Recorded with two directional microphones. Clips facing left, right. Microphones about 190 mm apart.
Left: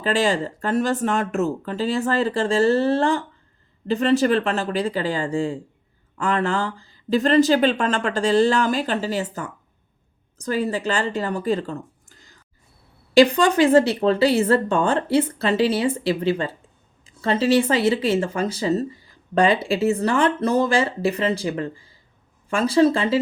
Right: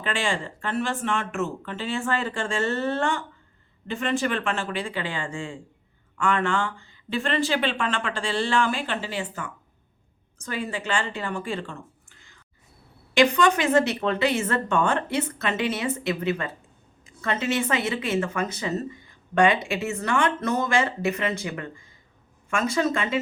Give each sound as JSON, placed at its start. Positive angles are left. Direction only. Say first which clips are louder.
{"t": 0.0, "sound": "speech", "louder": "left 7 dB", "side_deg": 40}